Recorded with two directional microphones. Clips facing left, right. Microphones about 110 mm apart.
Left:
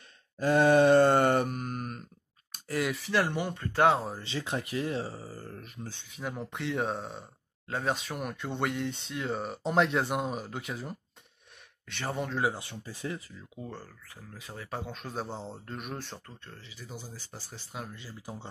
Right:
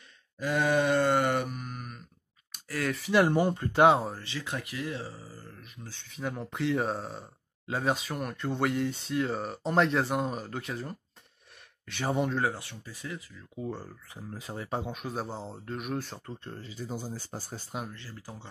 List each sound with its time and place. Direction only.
0.4 s groan: 35° left (ahead or behind)
3.1 s speech: 15° right (ahead or behind)
3.3 s speech: 35° right (ahead or behind)
3.6 s speech: 15° right (ahead or behind)
4.2 s speech: 25° left (ahead or behind)
6.0 s speech: centre (ahead or behind)
12.5 s speech: 25° left (ahead or behind)
13.6 s speech: 10° right (ahead or behind)
14.9 s speech: 10° right (ahead or behind)
16.5 s speech: 45° right (ahead or behind)
17.9 s speech: 15° left (ahead or behind)